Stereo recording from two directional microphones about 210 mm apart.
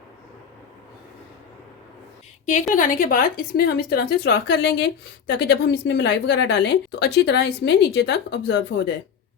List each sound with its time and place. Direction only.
2.7 s speech: 40° left (ahead or behind)